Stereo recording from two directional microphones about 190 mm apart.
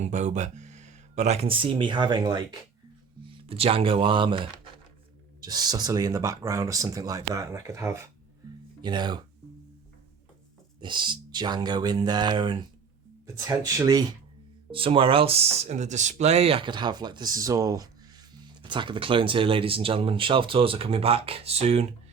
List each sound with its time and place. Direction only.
0.0 s speech: 40° right (ahead or behind); by 9.2 s 20° right (ahead or behind)
10.8 s speech: 25° right (ahead or behind)